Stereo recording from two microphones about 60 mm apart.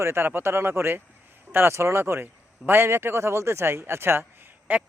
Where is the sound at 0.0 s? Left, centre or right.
Right.